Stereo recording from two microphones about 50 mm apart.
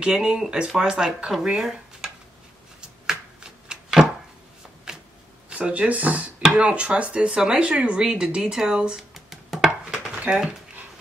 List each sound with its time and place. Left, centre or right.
0.0 s speech: centre
3.1 s chopping: centre
5.5 s speech: right
6.4 s speech: centre
9.1 s music: centre